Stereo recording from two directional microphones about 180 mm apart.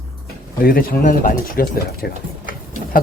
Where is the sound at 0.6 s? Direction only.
55° left (ahead or behind).